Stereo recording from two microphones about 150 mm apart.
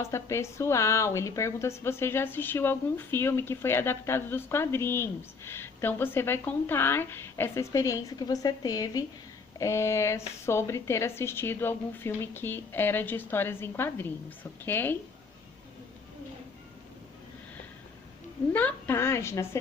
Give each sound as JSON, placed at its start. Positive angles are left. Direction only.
{"t": 0.0, "sound": "a woman's voice", "side_deg": 20}
{"t": 18.5, "sound": "a woman's voice", "side_deg": 15}